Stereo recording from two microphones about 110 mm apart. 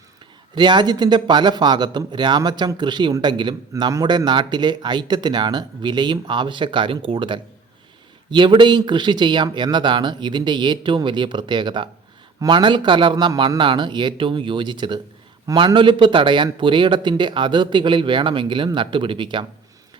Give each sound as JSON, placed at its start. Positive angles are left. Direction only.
{"t": 0.5, "sound": "a man's voice", "side_deg": -40}